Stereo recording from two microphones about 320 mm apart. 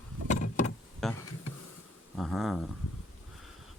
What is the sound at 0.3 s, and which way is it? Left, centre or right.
Insect, left.